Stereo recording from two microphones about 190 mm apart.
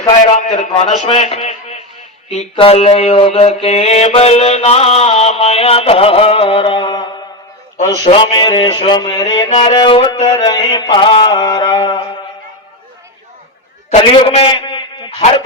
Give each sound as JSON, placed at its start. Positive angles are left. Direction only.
{"t": 0.6, "sound": "a man's voice", "side_deg": 35}
{"t": 2.3, "sound": "mantra", "side_deg": 30}
{"t": 8.0, "sound": "music", "side_deg": 25}
{"t": 13.9, "sound": "a man's voice", "side_deg": 30}